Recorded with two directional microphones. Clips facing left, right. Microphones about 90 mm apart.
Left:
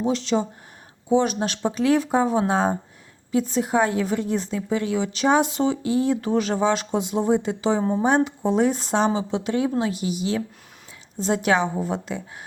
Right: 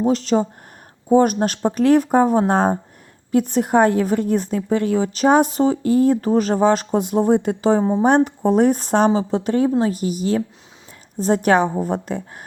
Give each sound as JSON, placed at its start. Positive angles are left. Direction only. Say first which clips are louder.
{"t": 0.0, "sound": "a woman's voice", "louder": "right 5 dB", "side_deg": -45}
{"t": 7.8, "sound": "speech", "louder": "right 4 dB", "side_deg": -25}
{"t": 8.0, "sound": "a woman's voice", "louder": "right 5 dB", "side_deg": -50}